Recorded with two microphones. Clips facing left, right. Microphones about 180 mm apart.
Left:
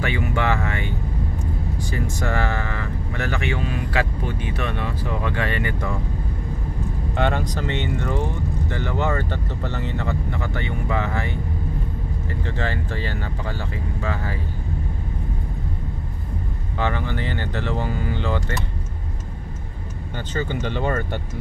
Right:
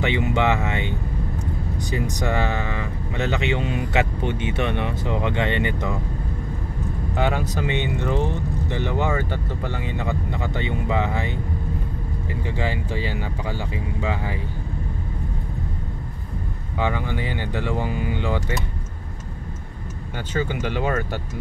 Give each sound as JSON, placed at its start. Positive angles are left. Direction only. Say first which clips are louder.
{"t": 0.0, "sound": "speech", "louder": "right 2 dB", "side_deg": -20}
{"t": 7.2, "sound": "speech", "louder": "even", "side_deg": -5}
{"t": 12.4, "sound": "speech", "louder": "right 1 dB", "side_deg": -10}
{"t": 16.7, "sound": "speech", "louder": "even", "side_deg": -15}
{"t": 20.3, "sound": "speech", "louder": "right 1 dB", "side_deg": -10}